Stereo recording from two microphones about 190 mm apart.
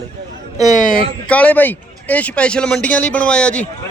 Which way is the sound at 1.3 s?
10° left (ahead or behind).